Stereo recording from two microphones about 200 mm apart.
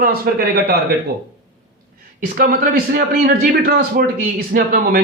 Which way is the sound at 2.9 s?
45° right (ahead or behind).